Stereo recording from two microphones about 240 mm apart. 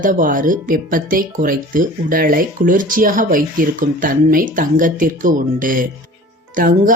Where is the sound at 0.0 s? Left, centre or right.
Right.